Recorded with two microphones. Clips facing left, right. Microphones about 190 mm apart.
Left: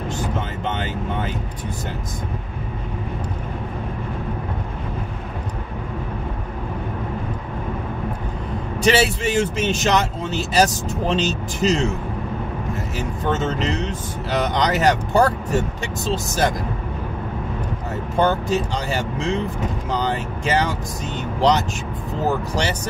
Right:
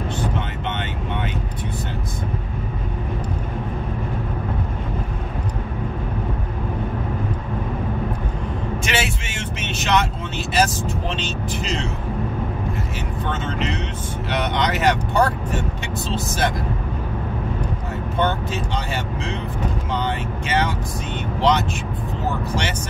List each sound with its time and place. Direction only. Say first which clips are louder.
8.8 s speech: left 11 dB; 35° left (ahead or behind)
13.3 s speech: left 4 dB; 40° left (ahead or behind)
18.1 s speech: left 4 dB; 40° left (ahead or behind)